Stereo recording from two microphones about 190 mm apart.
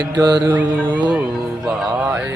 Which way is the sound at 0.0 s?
20° right (ahead or behind).